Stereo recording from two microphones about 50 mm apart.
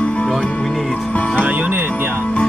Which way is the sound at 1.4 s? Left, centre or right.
Right.